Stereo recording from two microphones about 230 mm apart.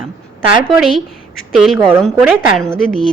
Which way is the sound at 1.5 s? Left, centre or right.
Centre.